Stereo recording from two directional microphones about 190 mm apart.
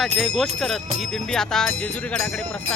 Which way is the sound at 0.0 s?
Centre (ahead or behind).